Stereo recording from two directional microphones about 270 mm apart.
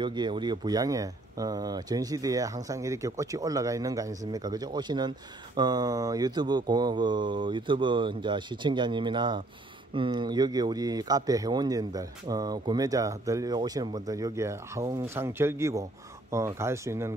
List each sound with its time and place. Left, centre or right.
0.0 s speech: centre